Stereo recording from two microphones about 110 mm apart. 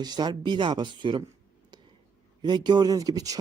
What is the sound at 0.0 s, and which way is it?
Speech, 40° right (ahead or behind).